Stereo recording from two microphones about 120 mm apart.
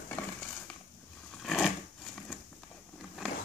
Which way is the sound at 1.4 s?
Centre (ahead or behind).